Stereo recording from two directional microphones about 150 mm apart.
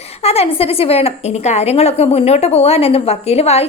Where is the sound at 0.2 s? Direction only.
40° left (ahead or behind).